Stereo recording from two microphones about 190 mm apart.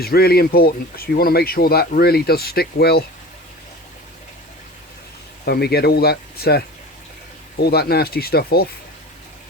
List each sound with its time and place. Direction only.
0.0 s speech: 55° left (ahead or behind)
5.5 s speech: 55° left (ahead or behind)